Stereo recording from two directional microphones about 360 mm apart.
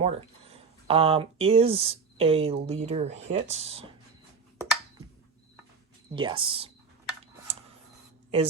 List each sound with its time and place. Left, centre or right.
0.0 s speech: centre
4.5 s a sound: centre
6.1 s speech: centre